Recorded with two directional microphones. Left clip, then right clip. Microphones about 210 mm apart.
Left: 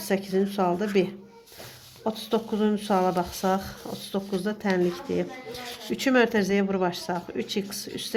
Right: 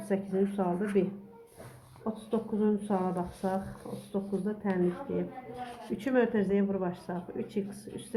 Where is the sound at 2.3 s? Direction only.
40° left (ahead or behind).